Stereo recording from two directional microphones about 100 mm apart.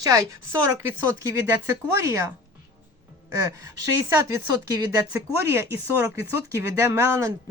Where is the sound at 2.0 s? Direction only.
25° right (ahead or behind).